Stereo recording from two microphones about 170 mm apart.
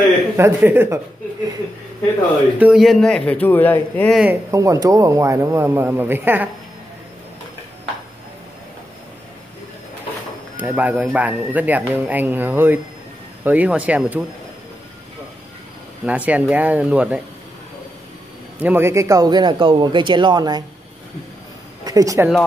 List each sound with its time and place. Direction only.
0.4 s speech: 10° right (ahead or behind)
2.6 s a man's voice: centre (ahead or behind)
4.1 s speech: 5° right (ahead or behind)
4.5 s speech: 20° right (ahead or behind)
10.6 s speech: 10° right (ahead or behind)
16.1 s speech: 10° right (ahead or behind)
18.6 s speech: 10° right (ahead or behind)
21.8 s speech: 20° right (ahead or behind)